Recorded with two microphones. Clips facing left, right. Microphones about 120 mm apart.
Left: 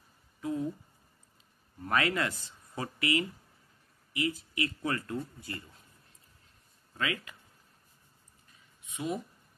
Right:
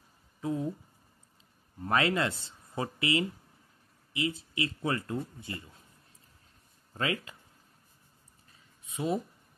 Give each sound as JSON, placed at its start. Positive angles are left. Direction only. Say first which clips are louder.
{"t": 0.4, "sound": "a sound", "louder": "right 1 dB", "side_deg": -25}
{"t": 1.8, "sound": "speech", "louder": "right 2 dB", "side_deg": -25}
{"t": 6.9, "sound": "speech", "louder": "right 2 dB", "side_deg": -30}
{"t": 8.8, "sound": "speech", "louder": "right 4 dB", "side_deg": -35}